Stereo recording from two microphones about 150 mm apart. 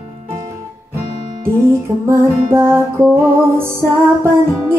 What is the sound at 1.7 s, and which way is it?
Music, 20° right (ahead or behind).